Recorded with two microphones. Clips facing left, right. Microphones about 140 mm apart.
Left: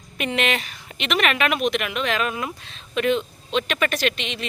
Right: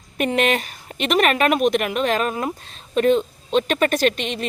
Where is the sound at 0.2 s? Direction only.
45° right (ahead or behind).